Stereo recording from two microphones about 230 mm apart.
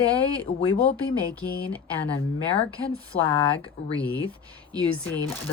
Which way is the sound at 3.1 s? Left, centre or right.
Left.